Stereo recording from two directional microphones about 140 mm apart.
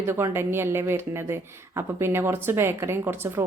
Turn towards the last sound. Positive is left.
turn(degrees=-15)  # may be behind; listen again after turning